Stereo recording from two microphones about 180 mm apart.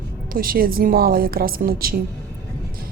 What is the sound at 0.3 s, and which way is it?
A woman's voice, 55° right (ahead or behind).